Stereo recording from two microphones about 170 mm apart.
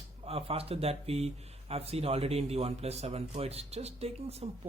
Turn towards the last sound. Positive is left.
turn(degrees=-35)  # may be behind; listen again after turning